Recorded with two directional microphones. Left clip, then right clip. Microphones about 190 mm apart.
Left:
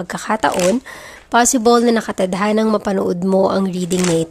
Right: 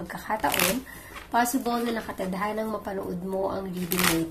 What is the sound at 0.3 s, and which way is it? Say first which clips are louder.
A woman's voice: left 10 dB; 55° left (ahead or behind).